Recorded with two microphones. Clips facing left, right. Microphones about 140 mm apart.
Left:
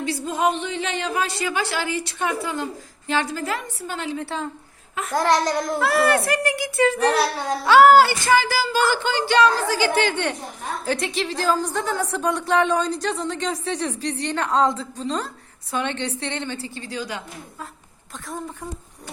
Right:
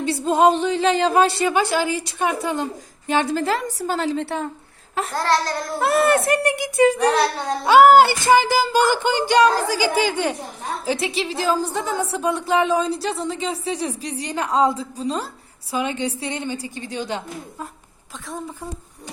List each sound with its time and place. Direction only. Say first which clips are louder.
0.0 s a woman's voice: right 6 dB; 25° right (ahead or behind)
4.2 s a woman's voice: right 3 dB; 60° right (ahead or behind)
5.1 s babbling: left 2 dB; 15° left (ahead or behind)
5.8 s a woman's voice: right 3 dB; 25° right (ahead or behind)